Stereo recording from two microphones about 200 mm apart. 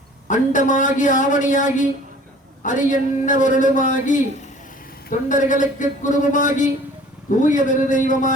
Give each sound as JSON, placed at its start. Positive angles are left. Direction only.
{"t": 0.3, "sound": "speech", "side_deg": 40}